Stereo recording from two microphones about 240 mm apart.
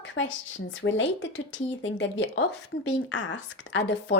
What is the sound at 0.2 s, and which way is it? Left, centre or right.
A woman's voice, left.